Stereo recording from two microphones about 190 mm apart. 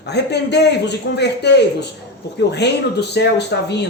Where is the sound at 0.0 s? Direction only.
60° left (ahead or behind).